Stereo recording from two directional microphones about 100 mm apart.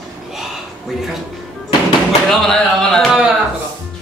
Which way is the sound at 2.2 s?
5° left (ahead or behind).